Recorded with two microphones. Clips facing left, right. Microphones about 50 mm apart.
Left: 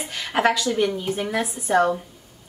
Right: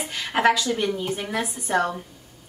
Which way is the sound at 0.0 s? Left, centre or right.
Centre.